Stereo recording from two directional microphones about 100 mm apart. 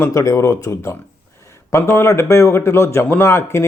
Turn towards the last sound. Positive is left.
turn(degrees=25)  # may be behind; listen again after turning